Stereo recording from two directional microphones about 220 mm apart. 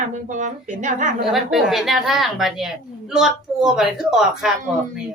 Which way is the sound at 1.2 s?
Centre (ahead or behind).